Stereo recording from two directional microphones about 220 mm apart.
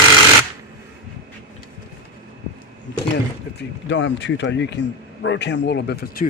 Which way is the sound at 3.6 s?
55° left (ahead or behind).